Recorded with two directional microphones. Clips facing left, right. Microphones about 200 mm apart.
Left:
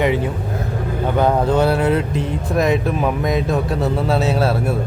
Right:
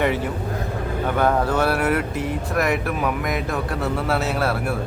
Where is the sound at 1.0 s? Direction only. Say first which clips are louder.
Left 3 dB; 20° left (ahead or behind).